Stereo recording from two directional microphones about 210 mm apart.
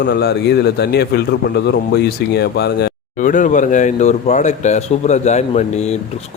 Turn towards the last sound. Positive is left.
turn(degrees=30)  # may be behind; listen again after turning